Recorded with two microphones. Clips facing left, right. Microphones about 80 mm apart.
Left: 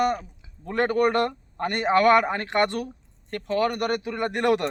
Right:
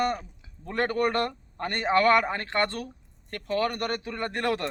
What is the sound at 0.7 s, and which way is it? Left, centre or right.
Speech, centre.